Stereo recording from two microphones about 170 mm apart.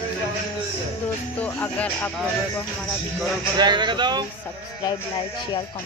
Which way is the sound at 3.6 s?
25° right (ahead or behind).